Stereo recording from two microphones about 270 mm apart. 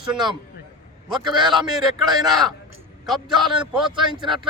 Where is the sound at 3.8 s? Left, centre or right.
Centre.